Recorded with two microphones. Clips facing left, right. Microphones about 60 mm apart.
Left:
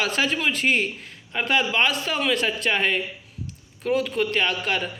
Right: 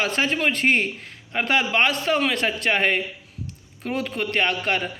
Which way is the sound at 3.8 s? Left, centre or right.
Right.